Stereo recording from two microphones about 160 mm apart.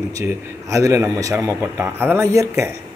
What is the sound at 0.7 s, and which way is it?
A man's voice, 20° right (ahead or behind).